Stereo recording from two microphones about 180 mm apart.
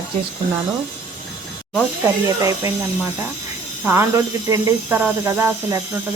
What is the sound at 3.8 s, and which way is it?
Speech, 15° right (ahead or behind).